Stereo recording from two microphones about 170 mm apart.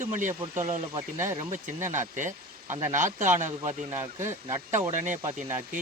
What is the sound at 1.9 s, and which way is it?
Speech, 45° right (ahead or behind).